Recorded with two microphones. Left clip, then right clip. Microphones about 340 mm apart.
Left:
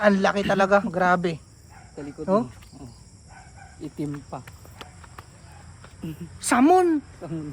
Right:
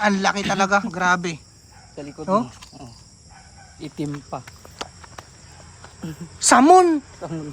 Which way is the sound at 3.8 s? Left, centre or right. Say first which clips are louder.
Right 3 dB; right.